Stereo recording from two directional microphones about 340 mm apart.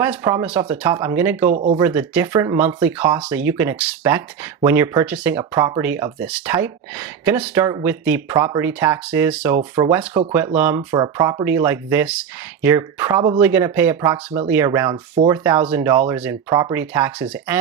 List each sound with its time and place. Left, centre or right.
0.0 s speech: centre
1.5 s speech: right
1.8 s speech: centre